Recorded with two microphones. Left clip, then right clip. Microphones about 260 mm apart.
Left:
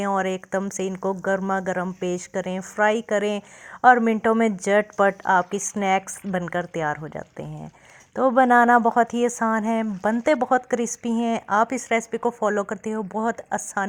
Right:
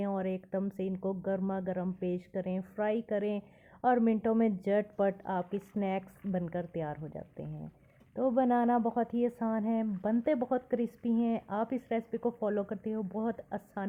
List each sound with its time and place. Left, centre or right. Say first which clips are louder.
0.0 s speech: left 11 dB; centre